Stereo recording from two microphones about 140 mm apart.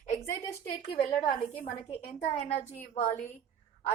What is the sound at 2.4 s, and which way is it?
Speech, 50° left (ahead or behind).